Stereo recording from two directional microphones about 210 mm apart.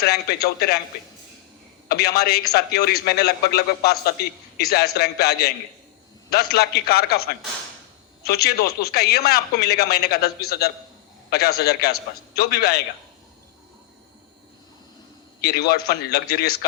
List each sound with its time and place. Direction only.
0.0 s a man's voice: 50° left (ahead or behind)
1.9 s a man's voice: 50° left (ahead or behind)
8.2 s a man's voice: 50° left (ahead or behind)
15.4 s a man's voice: 50° left (ahead or behind)